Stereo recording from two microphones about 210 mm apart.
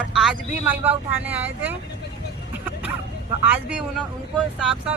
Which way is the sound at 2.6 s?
5° right (ahead or behind).